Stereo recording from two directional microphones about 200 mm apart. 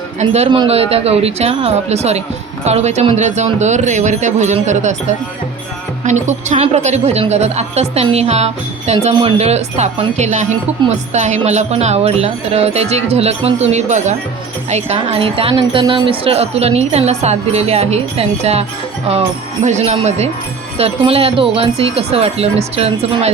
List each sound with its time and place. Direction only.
0.2 s speech: 30° right (ahead or behind)
6.1 s speech: 35° right (ahead or behind)
19.6 s speech: 35° right (ahead or behind)